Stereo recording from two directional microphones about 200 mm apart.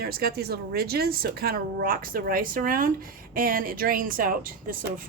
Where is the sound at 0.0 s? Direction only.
50° right (ahead or behind).